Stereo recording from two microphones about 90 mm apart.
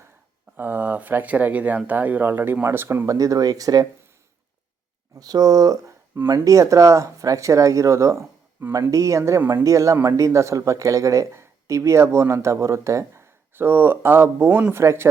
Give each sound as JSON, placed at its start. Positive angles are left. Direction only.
{"t": 0.5, "sound": "speech", "side_deg": -20}
{"t": 3.2, "sound": "speech", "side_deg": -40}
{"t": 5.1, "sound": "speech", "side_deg": -45}